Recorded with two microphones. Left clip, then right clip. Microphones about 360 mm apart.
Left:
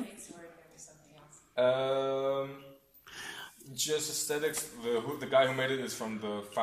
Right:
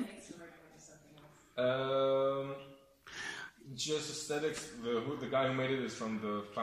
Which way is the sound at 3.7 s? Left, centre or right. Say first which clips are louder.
Left 4 dB; left.